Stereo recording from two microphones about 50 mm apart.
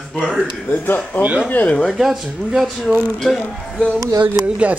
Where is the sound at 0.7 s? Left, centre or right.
Left.